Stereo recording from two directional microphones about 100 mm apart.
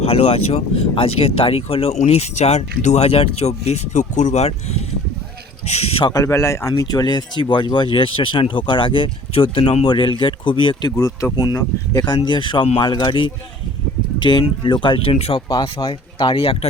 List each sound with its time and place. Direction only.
0.0 s speech: 85° left
6.1 s speech: 35° left (ahead or behind)
6.8 s speech: 45° left (ahead or behind)
10.9 s speech: 30° left (ahead or behind)
11.9 s speech: 45° left (ahead or behind); by 15.4 s 70° left (ahead or behind)
15.4 s speech: 40° left (ahead or behind)
15.9 s speech: 55° left (ahead or behind)